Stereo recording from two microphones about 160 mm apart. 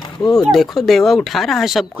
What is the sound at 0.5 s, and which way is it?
Speech, centre (ahead or behind).